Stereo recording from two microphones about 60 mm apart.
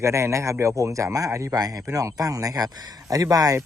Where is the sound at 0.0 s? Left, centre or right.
Right.